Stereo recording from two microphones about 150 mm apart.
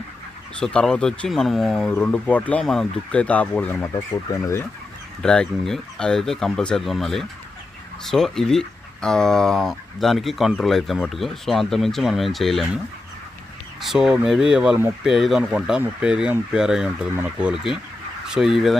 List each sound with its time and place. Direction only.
0.6 s speech: 5° left (ahead or behind)
3.9 s speech: 20° left (ahead or behind)
5.2 s speech: 5° left (ahead or behind)
13.8 s speech: 5° right (ahead or behind)